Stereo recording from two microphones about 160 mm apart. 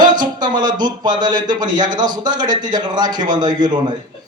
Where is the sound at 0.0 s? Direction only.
25° right (ahead or behind).